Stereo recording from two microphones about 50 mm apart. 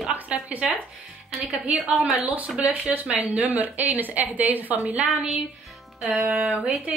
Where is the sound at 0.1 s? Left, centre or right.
Right.